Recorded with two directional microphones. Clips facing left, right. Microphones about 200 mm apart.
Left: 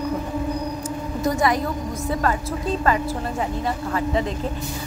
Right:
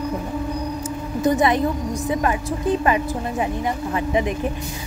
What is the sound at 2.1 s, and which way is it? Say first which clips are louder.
A woman's voice: right 1 dB; 15° right (ahead or behind).